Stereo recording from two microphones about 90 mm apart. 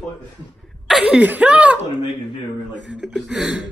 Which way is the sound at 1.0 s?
15° right (ahead or behind).